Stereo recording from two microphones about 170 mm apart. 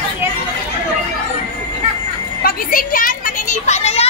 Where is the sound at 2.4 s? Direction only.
55° left (ahead or behind); by 4.1 s 35° left (ahead or behind).